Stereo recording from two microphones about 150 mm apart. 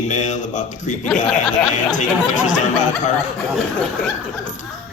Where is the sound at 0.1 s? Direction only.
55° left (ahead or behind).